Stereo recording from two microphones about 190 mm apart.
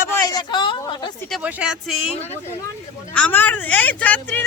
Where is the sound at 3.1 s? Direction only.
10° left (ahead or behind).